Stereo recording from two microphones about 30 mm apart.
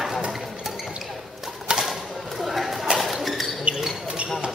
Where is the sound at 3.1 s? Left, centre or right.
Centre.